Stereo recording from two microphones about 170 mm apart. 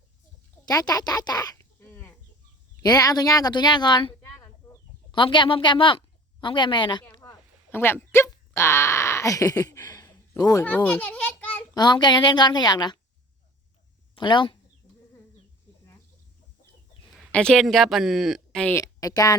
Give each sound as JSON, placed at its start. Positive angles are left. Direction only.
{"t": 0.6, "sound": "a sound", "side_deg": 25}
{"t": 2.8, "sound": "speech", "side_deg": 20}
{"t": 5.1, "sound": "speech", "side_deg": 30}
{"t": 7.1, "sound": "a sound", "side_deg": 25}
{"t": 7.7, "sound": "speech", "side_deg": 15}
{"t": 10.7, "sound": "a child's voice", "side_deg": 10}
{"t": 11.7, "sound": "speech", "side_deg": 25}
{"t": 14.2, "sound": "speech", "side_deg": 25}
{"t": 17.3, "sound": "speech", "side_deg": 5}
{"t": 18.8, "sound": "a woman's voice", "side_deg": 20}